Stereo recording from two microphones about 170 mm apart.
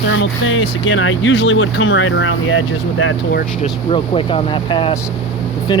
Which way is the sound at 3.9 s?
30° left (ahead or behind).